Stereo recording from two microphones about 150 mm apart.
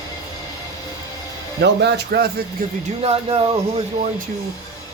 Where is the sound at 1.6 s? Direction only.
90° right.